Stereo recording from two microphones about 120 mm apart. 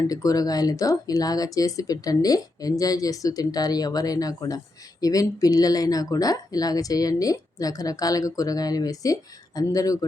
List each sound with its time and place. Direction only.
0.1 s speech: 30° left (ahead or behind)